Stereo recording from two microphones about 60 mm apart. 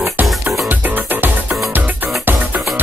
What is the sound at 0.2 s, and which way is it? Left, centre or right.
Music, right.